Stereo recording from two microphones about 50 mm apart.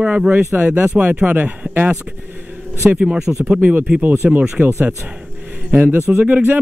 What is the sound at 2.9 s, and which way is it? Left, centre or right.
Speech, centre.